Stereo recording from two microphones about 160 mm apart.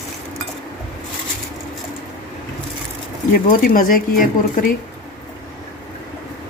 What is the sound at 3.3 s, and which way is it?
Speech, 65° left (ahead or behind).